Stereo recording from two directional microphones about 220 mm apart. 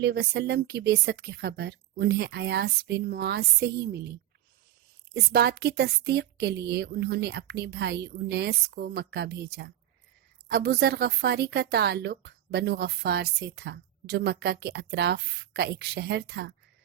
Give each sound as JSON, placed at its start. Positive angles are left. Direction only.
{"t": 0.0, "sound": "speech", "side_deg": -50}
{"t": 5.1, "sound": "speech", "side_deg": -45}